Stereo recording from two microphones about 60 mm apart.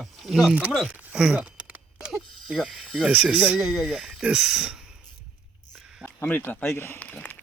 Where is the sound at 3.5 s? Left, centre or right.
Centre.